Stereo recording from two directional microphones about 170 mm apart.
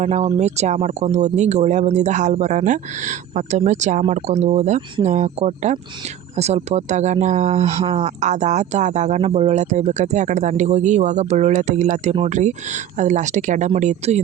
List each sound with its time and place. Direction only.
0.0 s speech: 40° right (ahead or behind)